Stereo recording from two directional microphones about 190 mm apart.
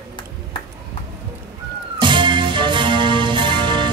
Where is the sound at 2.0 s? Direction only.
25° right (ahead or behind).